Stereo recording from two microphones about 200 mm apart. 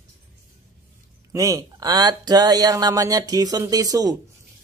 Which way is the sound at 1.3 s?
15° right (ahead or behind).